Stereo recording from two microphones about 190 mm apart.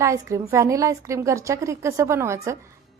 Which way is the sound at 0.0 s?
15° right (ahead or behind).